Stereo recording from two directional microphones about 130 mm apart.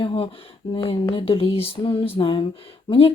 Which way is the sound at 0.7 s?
45° left (ahead or behind).